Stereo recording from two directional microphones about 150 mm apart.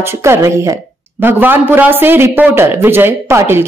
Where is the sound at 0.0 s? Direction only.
15° right (ahead or behind).